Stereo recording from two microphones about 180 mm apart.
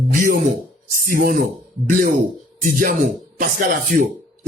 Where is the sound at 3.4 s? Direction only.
50° right (ahead or behind).